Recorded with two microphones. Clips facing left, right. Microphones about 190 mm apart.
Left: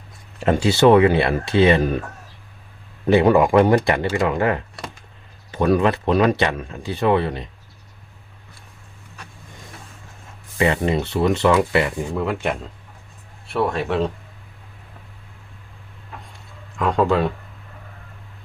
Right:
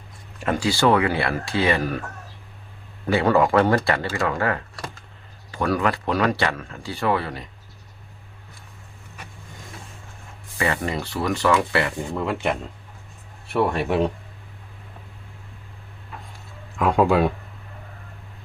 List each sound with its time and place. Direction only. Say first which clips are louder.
0.3 s speech: left 5 dB; 25° left (ahead or behind)
3.1 s speech: left 4 dB; 20° left (ahead or behind)
10.6 s speech: left 5 dB; 25° left (ahead or behind)
12.1 s speech: even; centre (ahead or behind)
13.5 s speech: even; 10° right (ahead or behind)
16.7 s speech: even; 10° right (ahead or behind)